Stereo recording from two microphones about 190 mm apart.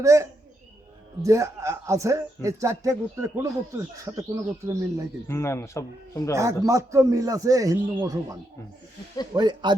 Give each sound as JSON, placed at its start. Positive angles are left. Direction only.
{"t": 0.0, "sound": "speech", "side_deg": -15}
{"t": 5.3, "sound": "speech", "side_deg": 15}
{"t": 6.3, "sound": "speech", "side_deg": -15}